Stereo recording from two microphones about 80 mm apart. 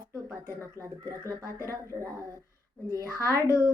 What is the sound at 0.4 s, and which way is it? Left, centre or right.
Speech, right.